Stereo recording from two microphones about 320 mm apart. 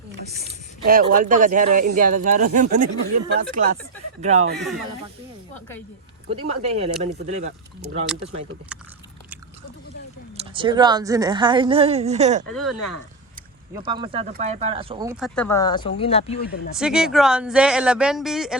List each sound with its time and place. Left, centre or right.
0.9 s speech: right
4.5 s speech: centre
6.3 s speech: centre
10.3 s speech: centre
13.8 s speech: centre
16.7 s speech: centre